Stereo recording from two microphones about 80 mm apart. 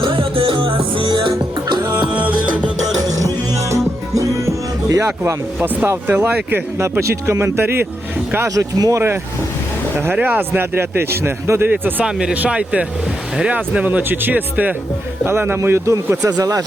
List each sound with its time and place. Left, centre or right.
0.0 s music: right
3.1 s music: right
5.6 s a man's voice: right
7.0 s a man's voice: right
8.4 s speech: right
10.0 s a man's voice: right
12.0 s a man's voice: centre; by 16.1 s right
16.2 s speech: right